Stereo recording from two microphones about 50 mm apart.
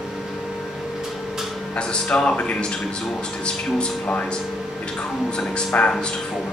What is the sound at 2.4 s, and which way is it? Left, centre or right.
Speech, left.